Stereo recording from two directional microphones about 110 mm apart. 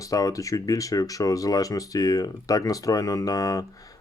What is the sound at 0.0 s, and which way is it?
Speech, 35° left (ahead or behind).